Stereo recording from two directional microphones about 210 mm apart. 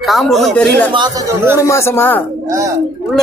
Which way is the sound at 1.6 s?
15° left (ahead or behind).